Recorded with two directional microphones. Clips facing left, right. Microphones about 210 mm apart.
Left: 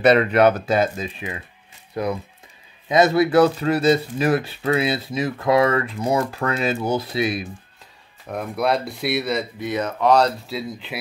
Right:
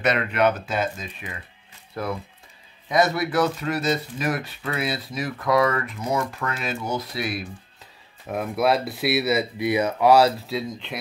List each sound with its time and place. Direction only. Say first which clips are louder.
0.0 s speech: left 7 dB; 35° left (ahead or behind)
2.0 s speech: left 4 dB; 20° left (ahead or behind)
8.3 s speech: even; 5° right (ahead or behind)